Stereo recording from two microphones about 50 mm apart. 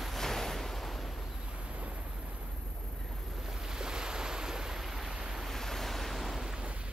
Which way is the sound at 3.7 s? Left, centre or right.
Centre.